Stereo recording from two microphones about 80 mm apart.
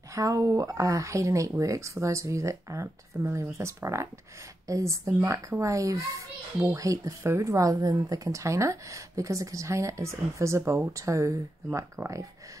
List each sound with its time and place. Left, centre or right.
0.1 s speech: right